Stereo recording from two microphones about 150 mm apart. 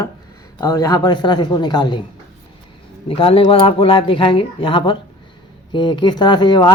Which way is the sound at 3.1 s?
40° left (ahead or behind).